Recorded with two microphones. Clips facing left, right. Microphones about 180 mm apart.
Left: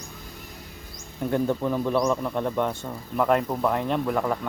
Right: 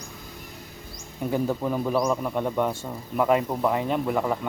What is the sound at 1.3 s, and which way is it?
A man's voice, 5° right (ahead or behind).